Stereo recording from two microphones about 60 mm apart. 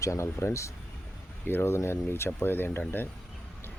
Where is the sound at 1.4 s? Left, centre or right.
Left.